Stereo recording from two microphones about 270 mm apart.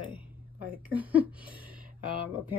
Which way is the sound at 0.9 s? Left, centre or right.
Centre.